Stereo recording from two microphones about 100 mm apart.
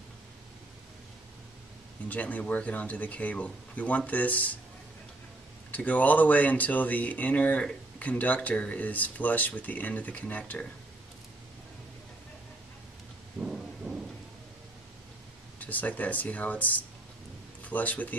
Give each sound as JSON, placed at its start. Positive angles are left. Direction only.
{"t": 2.0, "sound": "speech", "side_deg": 15}
{"t": 5.7, "sound": "speech", "side_deg": 15}
{"t": 13.4, "sound": "thunder", "side_deg": -5}
{"t": 15.6, "sound": "speech", "side_deg": 15}